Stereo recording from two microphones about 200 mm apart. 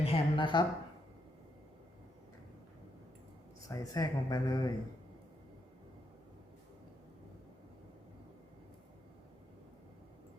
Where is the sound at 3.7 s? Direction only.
15° left (ahead or behind).